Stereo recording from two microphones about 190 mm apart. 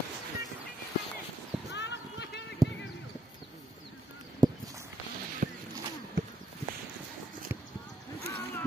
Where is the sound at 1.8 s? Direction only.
65° left (ahead or behind).